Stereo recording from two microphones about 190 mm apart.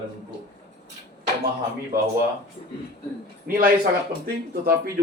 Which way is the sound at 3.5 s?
60° right (ahead or behind).